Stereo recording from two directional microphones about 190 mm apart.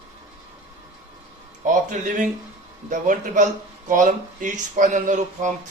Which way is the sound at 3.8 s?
45° right (ahead or behind).